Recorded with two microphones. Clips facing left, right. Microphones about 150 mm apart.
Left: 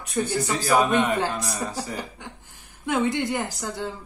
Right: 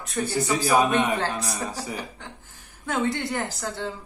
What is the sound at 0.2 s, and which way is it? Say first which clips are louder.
Speech: right 1 dB; 10° right (ahead or behind).